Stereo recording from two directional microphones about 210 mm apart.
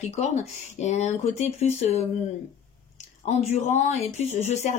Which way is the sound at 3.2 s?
30° left (ahead or behind).